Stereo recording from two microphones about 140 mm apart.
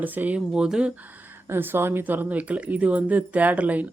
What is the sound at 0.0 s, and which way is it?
Speech, 10° right (ahead or behind).